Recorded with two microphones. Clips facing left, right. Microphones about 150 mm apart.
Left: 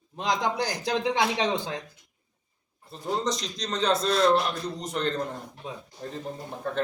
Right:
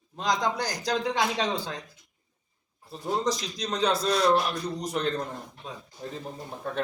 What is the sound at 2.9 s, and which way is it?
A man's voice, 5° right (ahead or behind).